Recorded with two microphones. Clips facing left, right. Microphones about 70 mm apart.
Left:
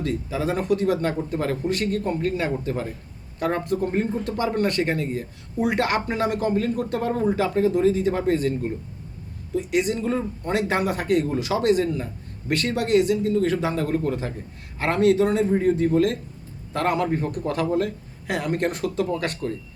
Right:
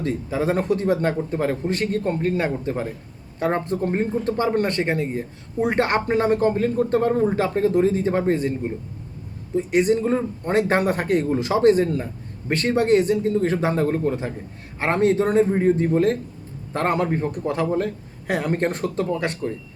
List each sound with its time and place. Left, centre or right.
0.0 s a man's voice: right
9.6 s a man's voice: right
17.1 s a man's voice: right
17.8 s a man's voice: right
19.2 s a man's voice: centre